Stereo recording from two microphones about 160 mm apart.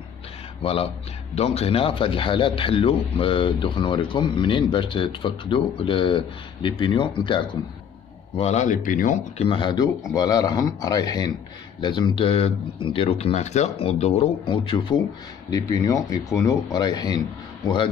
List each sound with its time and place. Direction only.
0.6 s a man's voice: 35° left (ahead or behind)
8.4 s speech: 45° left (ahead or behind)
9.4 s a man's voice: 30° left (ahead or behind)
15.5 s speech: 20° left (ahead or behind)